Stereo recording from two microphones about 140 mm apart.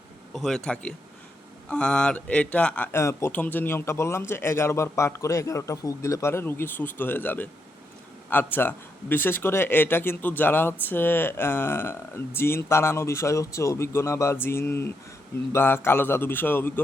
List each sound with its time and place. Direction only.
0.3 s speech: 5° left (ahead or behind)